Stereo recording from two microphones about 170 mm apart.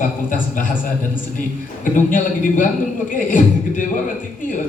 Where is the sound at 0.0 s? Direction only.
50° left (ahead or behind).